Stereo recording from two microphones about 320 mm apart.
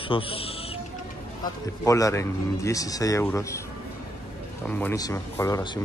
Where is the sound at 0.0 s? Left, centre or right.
Centre.